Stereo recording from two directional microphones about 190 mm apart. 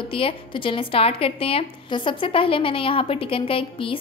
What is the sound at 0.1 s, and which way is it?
A woman's voice, 30° left (ahead or behind).